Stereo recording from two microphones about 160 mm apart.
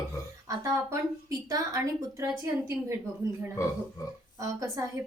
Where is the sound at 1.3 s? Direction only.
20° right (ahead or behind).